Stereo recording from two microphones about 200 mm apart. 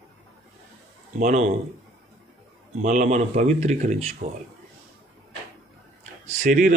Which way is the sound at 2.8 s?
40° right (ahead or behind).